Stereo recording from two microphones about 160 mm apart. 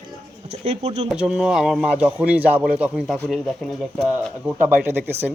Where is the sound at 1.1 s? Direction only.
5° right (ahead or behind).